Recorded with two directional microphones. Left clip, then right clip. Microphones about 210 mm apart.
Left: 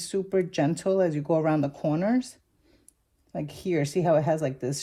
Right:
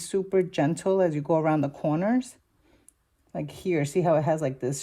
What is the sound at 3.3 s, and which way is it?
Speech, 35° right (ahead or behind).